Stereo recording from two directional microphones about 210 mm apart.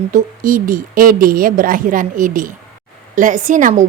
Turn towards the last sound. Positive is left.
turn(degrees=-35)  # may be behind; listen again after turning